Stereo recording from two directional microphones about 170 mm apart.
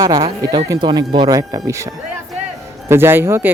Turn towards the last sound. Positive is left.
turn(degrees=-15)  # may be behind; listen again after turning